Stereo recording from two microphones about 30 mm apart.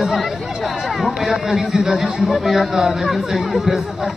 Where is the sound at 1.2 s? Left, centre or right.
Centre.